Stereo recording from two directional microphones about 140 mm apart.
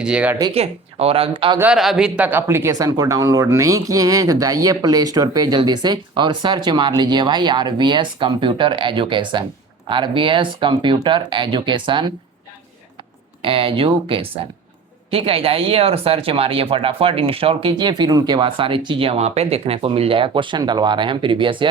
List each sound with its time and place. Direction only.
0.0 s speech: 10° right (ahead or behind)
0.5 s speech: 45° right (ahead or behind)
1.7 s speech: 5° right (ahead or behind); by 12.1 s 35° right (ahead or behind)
13.4 s speech: 40° right (ahead or behind)